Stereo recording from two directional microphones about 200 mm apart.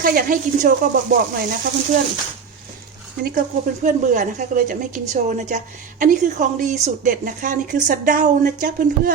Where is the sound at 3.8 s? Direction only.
40° right (ahead or behind).